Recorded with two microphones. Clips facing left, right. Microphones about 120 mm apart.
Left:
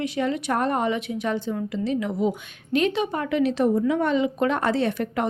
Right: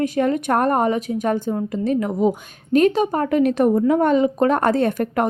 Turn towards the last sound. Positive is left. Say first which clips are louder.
# right 5 dB
turn(degrees=-50)  # may be behind; listen again after turning